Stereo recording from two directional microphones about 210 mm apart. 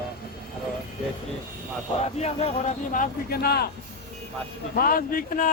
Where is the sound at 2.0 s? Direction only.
30° left (ahead or behind); by 3.7 s 50° left (ahead or behind).